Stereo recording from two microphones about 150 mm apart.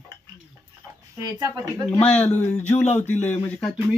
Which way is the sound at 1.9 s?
10° left (ahead or behind).